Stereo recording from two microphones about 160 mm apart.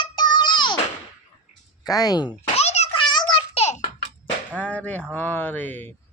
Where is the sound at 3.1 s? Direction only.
30° left (ahead or behind).